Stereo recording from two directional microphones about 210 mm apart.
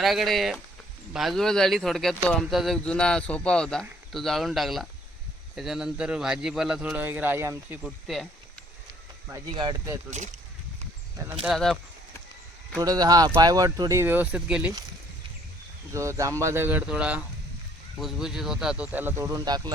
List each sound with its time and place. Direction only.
0.0 s speech: centre (ahead or behind)
9.5 s speech: 20° right (ahead or behind)
11.4 s speech: centre (ahead or behind)
12.8 s speech: 20° right (ahead or behind)
15.9 s speech: 15° right (ahead or behind)